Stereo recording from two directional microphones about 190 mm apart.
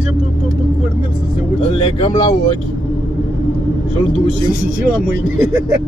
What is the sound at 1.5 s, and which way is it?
Speech, 25° left (ahead or behind).